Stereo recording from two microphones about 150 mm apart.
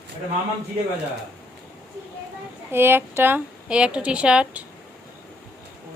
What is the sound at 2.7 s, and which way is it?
A woman's voice, 15° right (ahead or behind).